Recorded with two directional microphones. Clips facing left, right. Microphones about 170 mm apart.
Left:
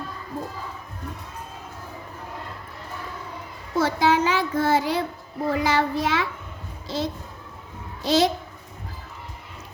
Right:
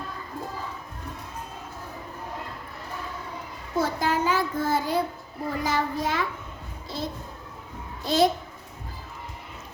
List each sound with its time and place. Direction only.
3.8 s child singing: 90° left
5.5 s a child's voice: 90° left